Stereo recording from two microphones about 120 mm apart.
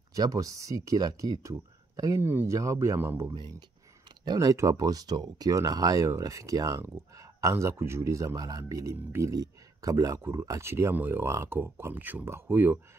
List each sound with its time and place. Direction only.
0.1 s speech: 30° right (ahead or behind)
4.2 s speech: 30° right (ahead or behind); by 12.7 s 15° right (ahead or behind)